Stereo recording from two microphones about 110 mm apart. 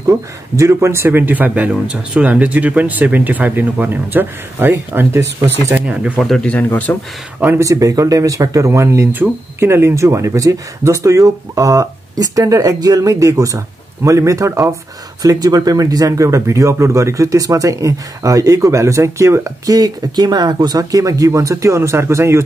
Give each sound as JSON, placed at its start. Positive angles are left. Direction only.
{"t": 0.0, "sound": "speech", "side_deg": -25}
{"t": 5.7, "sound": "speech", "side_deg": -15}
{"t": 6.2, "sound": "speech", "side_deg": 5}
{"t": 7.3, "sound": "speech", "side_deg": -15}
{"t": 7.6, "sound": "speech", "side_deg": -30}